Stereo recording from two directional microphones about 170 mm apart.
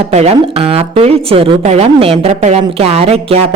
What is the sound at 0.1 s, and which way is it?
Speech, 40° right (ahead or behind).